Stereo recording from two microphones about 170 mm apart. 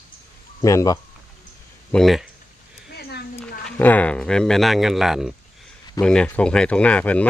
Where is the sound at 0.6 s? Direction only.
20° left (ahead or behind).